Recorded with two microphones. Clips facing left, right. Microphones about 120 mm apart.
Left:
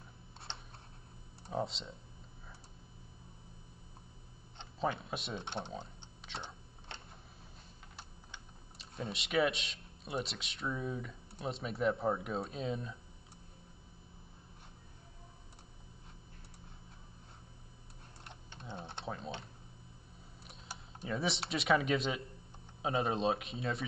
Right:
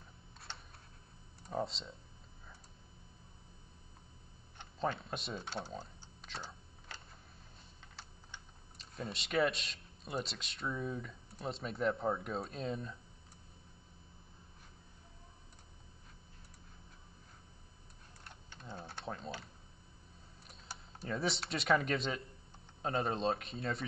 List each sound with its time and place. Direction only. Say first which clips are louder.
1.5 s speech: left 1 dB; centre (ahead or behind)
4.7 s speech: left 1 dB; 5° left (ahead or behind)
5.4 s speech: left 1 dB; 25° left (ahead or behind)
5.8 s a sound: left 1 dB; centre (ahead or behind)
8.7 s speech: left 2 dB; centre (ahead or behind)
18.2 s typing: left 2 dB; 20° left (ahead or behind)
19.0 s typing: left 1 dB; 5° left (ahead or behind)
20.4 s computer keyboard: left 1 dB; 5° left (ahead or behind)
21.5 s speech: left 2 dB; centre (ahead or behind)